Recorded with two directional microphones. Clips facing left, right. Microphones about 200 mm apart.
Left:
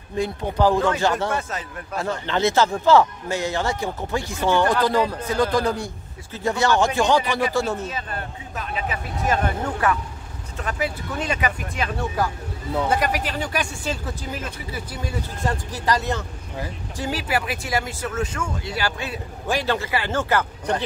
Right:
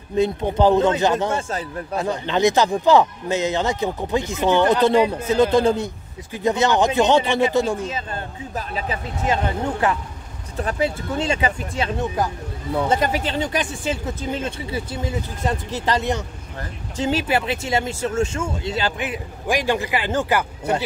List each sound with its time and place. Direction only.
0.2 s speech: 20° right (ahead or behind)
1.5 s speech: 30° right (ahead or behind)
2.0 s speech: 15° right (ahead or behind)
7.9 s speech: 30° right (ahead or behind); by 20.7 s 15° right (ahead or behind)